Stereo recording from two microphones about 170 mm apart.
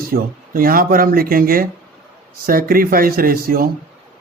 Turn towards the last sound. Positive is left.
turn(degrees=-55)  # may be behind; listen again after turning